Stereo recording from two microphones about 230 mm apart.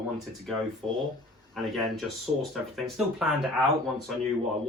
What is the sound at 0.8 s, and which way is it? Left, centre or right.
Speech, centre.